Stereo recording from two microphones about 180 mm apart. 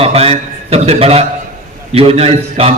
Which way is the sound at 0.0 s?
35° right (ahead or behind).